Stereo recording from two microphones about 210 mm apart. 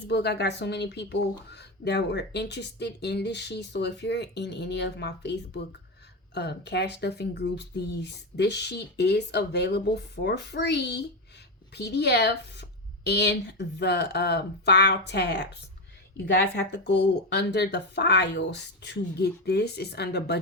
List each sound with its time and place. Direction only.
0.1 s speech: 50° left (ahead or behind)
16.6 s speech: 55° left (ahead or behind)